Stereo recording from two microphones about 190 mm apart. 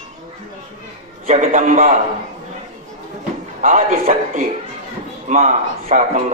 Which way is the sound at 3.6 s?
40° right (ahead or behind).